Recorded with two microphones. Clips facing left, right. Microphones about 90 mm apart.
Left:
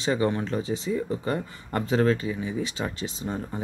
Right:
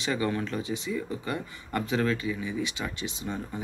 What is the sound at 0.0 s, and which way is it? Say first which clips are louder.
Speech: left 4 dB; 30° left (ahead or behind).